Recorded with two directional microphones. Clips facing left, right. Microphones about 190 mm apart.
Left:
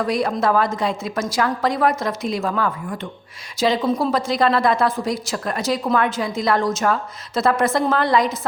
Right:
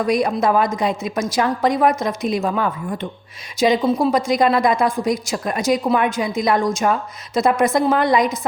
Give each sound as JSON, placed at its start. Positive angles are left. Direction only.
{"t": 0.0, "sound": "a woman's voice", "side_deg": -15}